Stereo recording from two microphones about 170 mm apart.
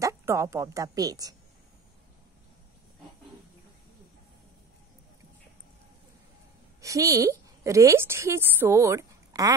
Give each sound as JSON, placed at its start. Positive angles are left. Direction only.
{"t": 0.0, "sound": "a woman's voice", "side_deg": -15}
{"t": 6.8, "sound": "a woman's voice", "side_deg": -20}